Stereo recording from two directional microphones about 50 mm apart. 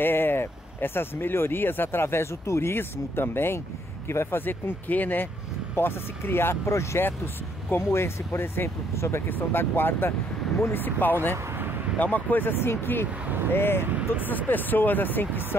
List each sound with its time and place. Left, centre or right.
0.0 s speech: left
2.7 s speech: left
5.8 s speech: left
7.7 s speech: left
9.3 s speech: left
11.5 s vehicle: right
12.0 s speech: left
13.9 s speech: right
14.3 s speech: left